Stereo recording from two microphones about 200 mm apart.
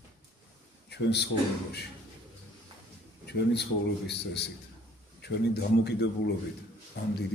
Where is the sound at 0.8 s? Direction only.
55° left (ahead or behind).